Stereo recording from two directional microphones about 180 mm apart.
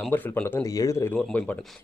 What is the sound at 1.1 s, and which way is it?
Speech, 5° left (ahead or behind).